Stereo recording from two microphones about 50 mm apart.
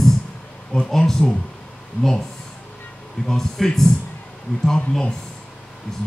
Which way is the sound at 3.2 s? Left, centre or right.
Centre.